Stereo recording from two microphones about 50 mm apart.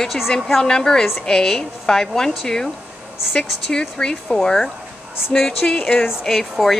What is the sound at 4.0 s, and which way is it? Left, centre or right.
Speech, centre.